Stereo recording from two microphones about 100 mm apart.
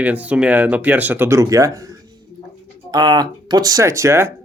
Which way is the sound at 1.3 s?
35° right (ahead or behind).